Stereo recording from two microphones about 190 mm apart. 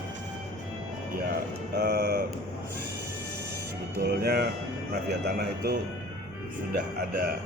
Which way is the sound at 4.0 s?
55° right (ahead or behind).